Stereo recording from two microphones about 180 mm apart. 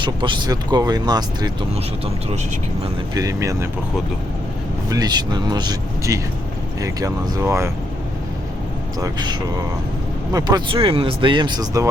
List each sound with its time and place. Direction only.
0.0 s speech: 25° right (ahead or behind)
3.2 s speech: 15° right (ahead or behind)
4.9 s speech: 20° right (ahead or behind)
9.0 s speech: 25° right (ahead or behind)